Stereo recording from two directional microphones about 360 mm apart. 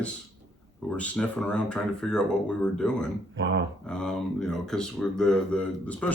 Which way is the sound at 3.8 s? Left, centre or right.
Centre.